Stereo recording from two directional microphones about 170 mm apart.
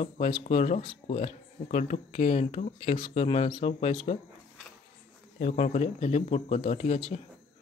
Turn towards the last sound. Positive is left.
turn(degrees=35)  # may be behind; listen again after turning